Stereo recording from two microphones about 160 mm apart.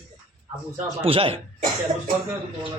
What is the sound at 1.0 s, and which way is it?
Speech, 35° right (ahead or behind).